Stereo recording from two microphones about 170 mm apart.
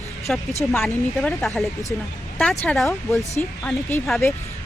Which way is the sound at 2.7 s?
Centre (ahead or behind).